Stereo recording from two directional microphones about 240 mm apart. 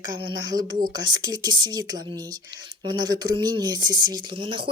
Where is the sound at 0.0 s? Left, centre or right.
Centre.